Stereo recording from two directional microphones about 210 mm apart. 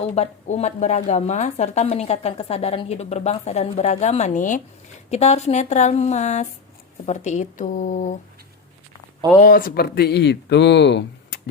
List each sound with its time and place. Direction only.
0.1 s speech: 30° left (ahead or behind)
9.4 s speech: 40° left (ahead or behind)